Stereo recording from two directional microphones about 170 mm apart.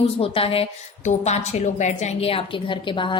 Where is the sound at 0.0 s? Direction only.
35° left (ahead or behind).